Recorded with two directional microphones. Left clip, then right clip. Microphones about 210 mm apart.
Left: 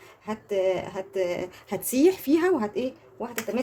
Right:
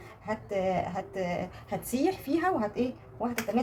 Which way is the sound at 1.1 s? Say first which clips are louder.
Left 8 dB; 55° left (ahead or behind).